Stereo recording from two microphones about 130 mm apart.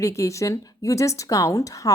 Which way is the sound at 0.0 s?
25° left (ahead or behind).